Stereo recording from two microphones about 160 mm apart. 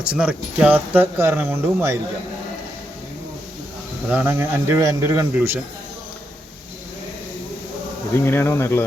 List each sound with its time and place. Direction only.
0.0 s speech: 5° right (ahead or behind)
4.1 s speech: 10° right (ahead or behind)
8.3 s speech: 15° left (ahead or behind)